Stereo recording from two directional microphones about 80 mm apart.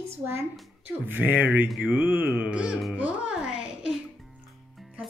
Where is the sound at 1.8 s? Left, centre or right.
Right.